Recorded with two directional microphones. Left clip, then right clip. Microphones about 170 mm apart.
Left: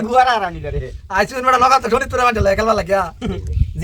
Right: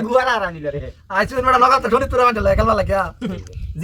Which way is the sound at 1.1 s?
40° left (ahead or behind).